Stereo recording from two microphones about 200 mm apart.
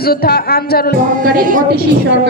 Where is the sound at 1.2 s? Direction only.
45° right (ahead or behind).